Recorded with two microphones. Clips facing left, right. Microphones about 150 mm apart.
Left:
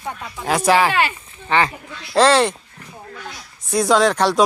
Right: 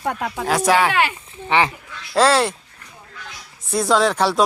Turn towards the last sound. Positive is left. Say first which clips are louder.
# left 2 dB
turn(degrees=-5)  # may be behind; listen again after turning